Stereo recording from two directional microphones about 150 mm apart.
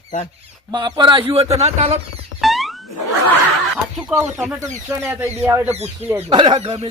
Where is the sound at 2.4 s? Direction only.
Centre (ahead or behind).